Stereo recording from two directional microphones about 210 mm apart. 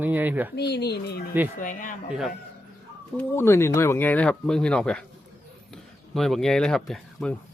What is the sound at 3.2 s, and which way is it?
Speech, 10° left (ahead or behind).